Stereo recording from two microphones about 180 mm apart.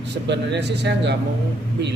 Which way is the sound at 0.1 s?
75° right (ahead or behind).